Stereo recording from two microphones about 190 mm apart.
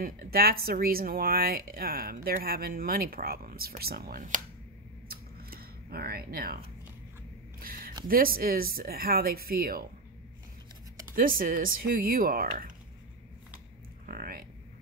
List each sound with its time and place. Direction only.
0.0 s speech: 50° right (ahead or behind)
5.1 s a sound: 50° right (ahead or behind)
7.6 s a sound: 50° right (ahead or behind)
8.1 s speech: 50° right (ahead or behind)
11.1 s speech: 50° right (ahead or behind)
14.0 s speech: 50° right (ahead or behind)